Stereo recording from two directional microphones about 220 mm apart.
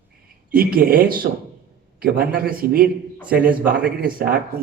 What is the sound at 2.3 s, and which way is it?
Speech, 40° right (ahead or behind).